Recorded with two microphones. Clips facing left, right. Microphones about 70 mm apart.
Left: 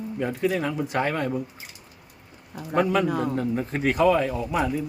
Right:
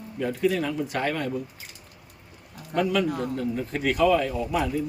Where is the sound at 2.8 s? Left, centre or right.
Left.